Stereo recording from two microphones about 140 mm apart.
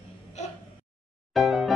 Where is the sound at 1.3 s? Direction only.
Centre (ahead or behind).